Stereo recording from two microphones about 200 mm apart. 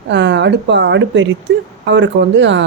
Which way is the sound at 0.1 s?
60° right (ahead or behind).